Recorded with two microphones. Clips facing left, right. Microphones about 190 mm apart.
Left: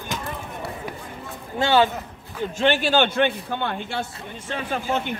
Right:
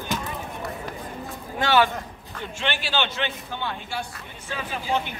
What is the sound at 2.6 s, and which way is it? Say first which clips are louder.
A man's voice: left 8 dB; 45° left (ahead or behind).